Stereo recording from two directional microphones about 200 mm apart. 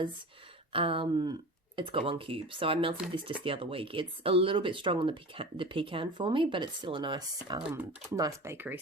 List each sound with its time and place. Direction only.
0.7 s speech: 25° right (ahead or behind)
7.7 s speech: 10° right (ahead or behind)